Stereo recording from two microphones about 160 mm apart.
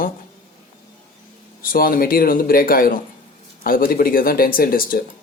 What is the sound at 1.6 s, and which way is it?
Speech, 65° left (ahead or behind).